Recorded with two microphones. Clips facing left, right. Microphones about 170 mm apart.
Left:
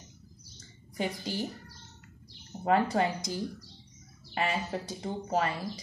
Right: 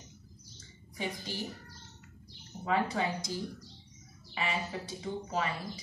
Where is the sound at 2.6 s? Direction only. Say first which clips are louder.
Left 5 dB; 40° left (ahead or behind).